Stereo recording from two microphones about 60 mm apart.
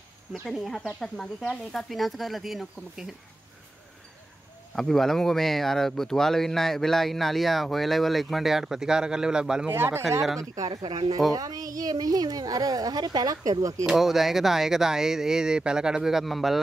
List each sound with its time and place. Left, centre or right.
0.4 s speech: centre
4.7 s speech: centre
9.7 s speech: right
11.3 s a woman's voice: right
13.8 s speech: centre